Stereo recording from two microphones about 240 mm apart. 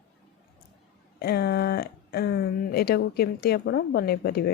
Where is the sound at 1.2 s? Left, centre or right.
Left.